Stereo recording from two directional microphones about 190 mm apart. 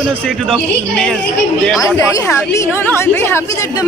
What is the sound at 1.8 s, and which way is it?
A woman's voice, 15° left (ahead or behind).